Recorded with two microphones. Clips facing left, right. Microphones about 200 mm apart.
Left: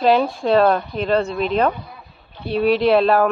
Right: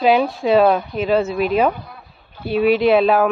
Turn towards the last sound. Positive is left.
turn(degrees=0)  # may be behind; listen again after turning